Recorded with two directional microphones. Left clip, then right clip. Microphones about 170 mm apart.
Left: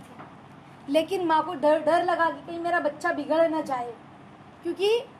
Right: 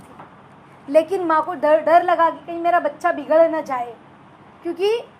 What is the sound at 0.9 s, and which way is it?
A woman's voice, 10° right (ahead or behind).